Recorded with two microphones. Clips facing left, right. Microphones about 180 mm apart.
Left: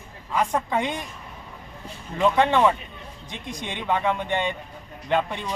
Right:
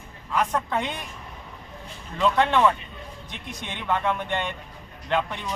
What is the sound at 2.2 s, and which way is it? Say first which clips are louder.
Speech: left 2 dB; 15° left (ahead or behind).